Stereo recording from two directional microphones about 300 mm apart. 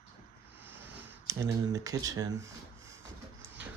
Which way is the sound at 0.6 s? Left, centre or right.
Centre.